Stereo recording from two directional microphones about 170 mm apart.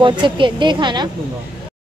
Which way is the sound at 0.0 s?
30° right (ahead or behind).